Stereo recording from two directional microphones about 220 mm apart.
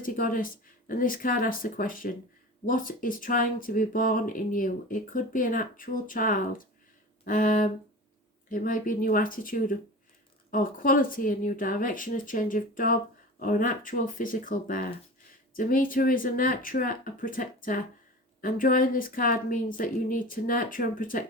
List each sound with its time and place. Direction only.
0.0 s speech: 40° left (ahead or behind)